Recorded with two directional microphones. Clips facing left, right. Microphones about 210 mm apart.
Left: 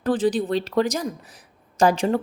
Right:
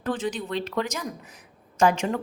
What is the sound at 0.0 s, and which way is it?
A woman's voice, 35° left (ahead or behind).